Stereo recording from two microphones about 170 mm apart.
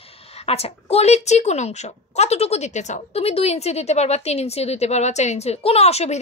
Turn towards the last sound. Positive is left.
turn(degrees=40)  # may be behind; listen again after turning